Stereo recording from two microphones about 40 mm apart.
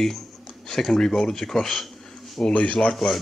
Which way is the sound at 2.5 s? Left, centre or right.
Left.